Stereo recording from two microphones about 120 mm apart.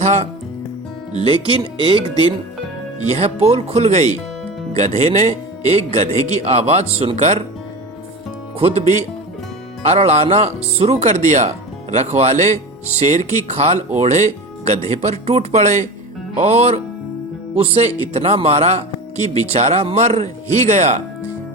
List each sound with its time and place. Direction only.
0.0 s speech: 75° right (ahead or behind)
1.3 s speech: 45° right (ahead or behind)
3.1 s speech: 60° right (ahead or behind)
8.5 s speech: 60° right (ahead or behind)